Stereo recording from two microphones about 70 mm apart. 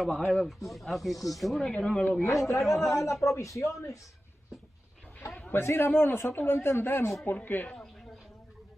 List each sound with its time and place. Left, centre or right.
0.0 s speech: centre
1.6 s speech: centre
2.3 s speech: left
5.5 s a man's voice: left
7.2 s speech: left